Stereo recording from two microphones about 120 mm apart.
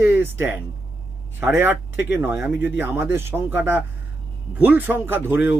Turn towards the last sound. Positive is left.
turn(degrees=-20)  # may be behind; listen again after turning